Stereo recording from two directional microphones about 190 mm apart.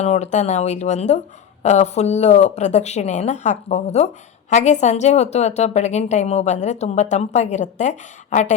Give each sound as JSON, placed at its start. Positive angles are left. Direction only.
{"t": 0.0, "sound": "speech", "side_deg": 35}